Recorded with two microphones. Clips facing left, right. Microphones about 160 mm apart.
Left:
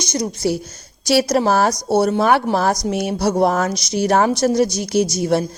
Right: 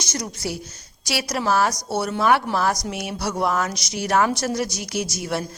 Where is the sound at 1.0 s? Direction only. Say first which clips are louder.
Left 9 dB; 35° left (ahead or behind).